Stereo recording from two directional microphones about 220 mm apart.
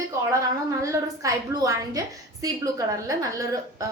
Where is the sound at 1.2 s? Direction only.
15° right (ahead or behind).